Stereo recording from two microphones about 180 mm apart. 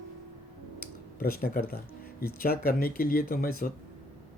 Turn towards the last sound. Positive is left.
turn(degrees=55)  # may be behind; listen again after turning